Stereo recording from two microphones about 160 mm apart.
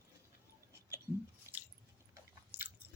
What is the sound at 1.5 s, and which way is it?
Squish, 20° left (ahead or behind).